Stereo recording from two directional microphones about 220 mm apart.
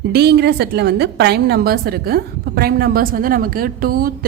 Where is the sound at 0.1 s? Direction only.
50° right (ahead or behind).